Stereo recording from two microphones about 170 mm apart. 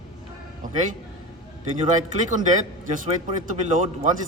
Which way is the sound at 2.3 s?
45° right (ahead or behind).